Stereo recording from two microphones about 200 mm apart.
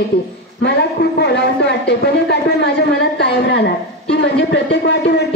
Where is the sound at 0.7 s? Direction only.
55° left (ahead or behind).